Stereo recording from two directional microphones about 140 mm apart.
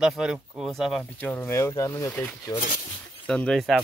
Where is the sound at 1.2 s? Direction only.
10° left (ahead or behind).